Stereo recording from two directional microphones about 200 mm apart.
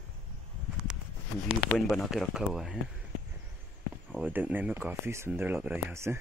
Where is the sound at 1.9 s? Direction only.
Centre (ahead or behind).